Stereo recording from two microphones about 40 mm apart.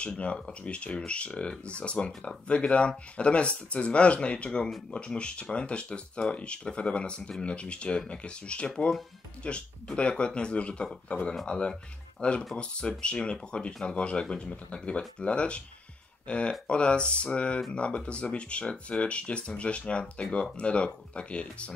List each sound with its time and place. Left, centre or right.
0.2 s speech: left